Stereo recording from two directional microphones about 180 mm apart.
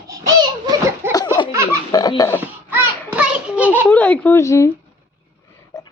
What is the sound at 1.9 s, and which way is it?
Speech, 20° left (ahead or behind).